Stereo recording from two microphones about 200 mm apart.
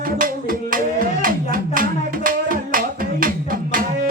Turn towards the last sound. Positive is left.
turn(degrees=-45)  # may be behind; listen again after turning